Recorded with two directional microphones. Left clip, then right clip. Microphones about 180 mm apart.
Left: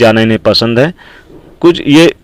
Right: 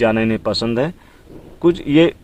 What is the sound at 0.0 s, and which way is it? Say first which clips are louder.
Speech: left 9 dB; 25° left (ahead or behind).